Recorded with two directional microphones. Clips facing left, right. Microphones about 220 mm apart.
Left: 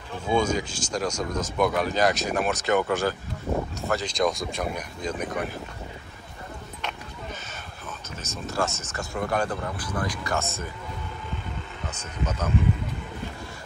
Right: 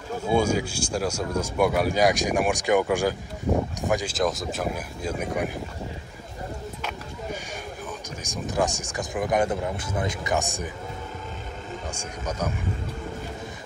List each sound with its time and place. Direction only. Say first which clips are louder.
0.3 s speech: right 1 dB; 10° right (ahead or behind)
8.2 s speech: right 3 dB; 15° right (ahead or behind)
11.9 s speech: left 3 dB; 10° right (ahead or behind)